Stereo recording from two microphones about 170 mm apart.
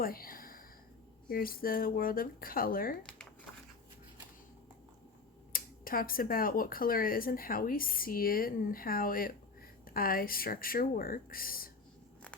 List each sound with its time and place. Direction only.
0.0 s a sound: 60° left (ahead or behind)
1.3 s speech: 60° left (ahead or behind)
5.5 s speech: 55° left (ahead or behind)